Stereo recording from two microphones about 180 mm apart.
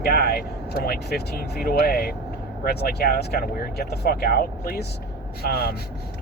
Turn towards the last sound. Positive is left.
turn(degrees=60)  # may be behind; listen again after turning